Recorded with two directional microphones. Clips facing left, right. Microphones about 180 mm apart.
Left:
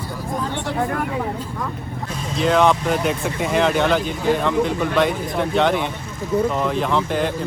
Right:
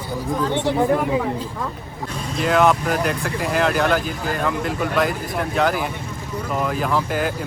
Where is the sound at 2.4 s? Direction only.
Centre (ahead or behind).